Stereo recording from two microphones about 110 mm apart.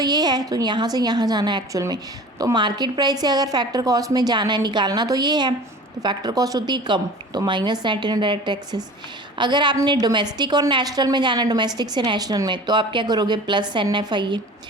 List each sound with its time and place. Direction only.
0.0 s a woman's voice: 40° right (ahead or behind)